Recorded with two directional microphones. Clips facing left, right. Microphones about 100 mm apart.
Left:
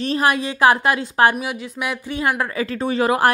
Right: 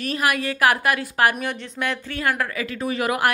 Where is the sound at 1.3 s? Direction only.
5° left (ahead or behind).